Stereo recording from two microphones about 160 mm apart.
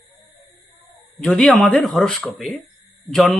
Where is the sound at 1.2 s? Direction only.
5° left (ahead or behind).